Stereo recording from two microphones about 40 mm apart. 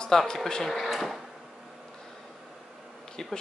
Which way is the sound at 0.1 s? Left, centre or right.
Centre.